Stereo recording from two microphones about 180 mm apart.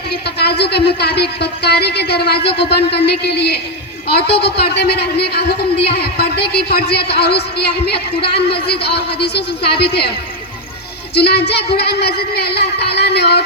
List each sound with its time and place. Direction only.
0.1 s speech: 65° left (ahead or behind)
11.1 s speech: 65° left (ahead or behind)